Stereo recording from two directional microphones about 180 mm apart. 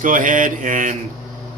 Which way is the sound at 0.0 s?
45° right (ahead or behind).